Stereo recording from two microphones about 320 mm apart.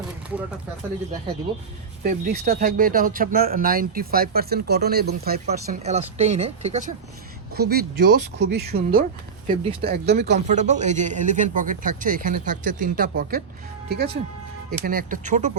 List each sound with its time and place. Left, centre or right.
2.0 s speech: right